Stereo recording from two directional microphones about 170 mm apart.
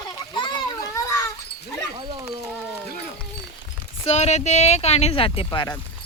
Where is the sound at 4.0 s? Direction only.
40° left (ahead or behind).